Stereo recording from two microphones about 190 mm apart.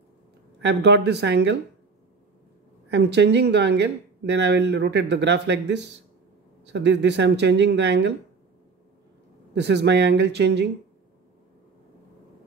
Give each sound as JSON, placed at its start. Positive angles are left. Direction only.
{"t": 0.6, "sound": "speech", "side_deg": -65}
{"t": 2.9, "sound": "speech", "side_deg": -65}
{"t": 9.5, "sound": "speech", "side_deg": -65}